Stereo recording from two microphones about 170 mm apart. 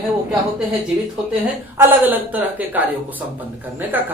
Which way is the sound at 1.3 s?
10° right (ahead or behind).